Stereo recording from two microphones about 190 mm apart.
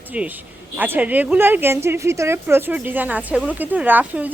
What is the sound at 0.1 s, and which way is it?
A woman's voice, 10° right (ahead or behind).